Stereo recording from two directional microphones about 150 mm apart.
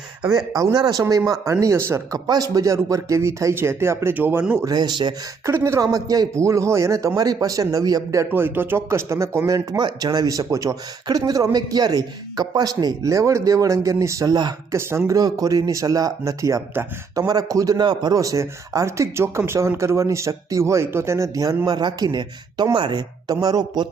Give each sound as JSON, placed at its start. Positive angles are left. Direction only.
{"t": 0.3, "sound": "speech", "side_deg": -25}
{"t": 4.7, "sound": "speech", "side_deg": -30}
{"t": 5.5, "sound": "speech", "side_deg": -15}